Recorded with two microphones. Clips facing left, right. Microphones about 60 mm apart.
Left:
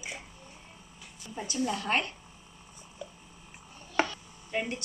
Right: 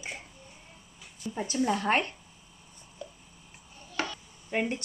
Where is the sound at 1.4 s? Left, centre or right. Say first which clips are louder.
Right 4 dB; right.